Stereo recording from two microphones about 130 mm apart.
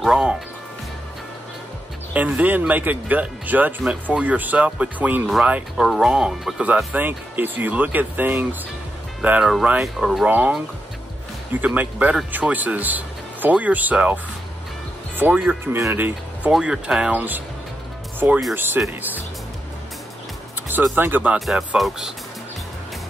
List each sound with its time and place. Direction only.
0.0 s music: 5° right (ahead or behind)
2.1 s speech: 10° right (ahead or behind)
10.3 s speech: 15° right (ahead or behind)
11.6 s speech: 10° right (ahead or behind)
18.5 s speech: 15° right (ahead or behind)
20.9 s speech: 15° right (ahead or behind)